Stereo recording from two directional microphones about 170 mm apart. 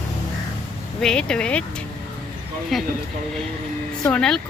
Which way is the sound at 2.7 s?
Centre (ahead or behind).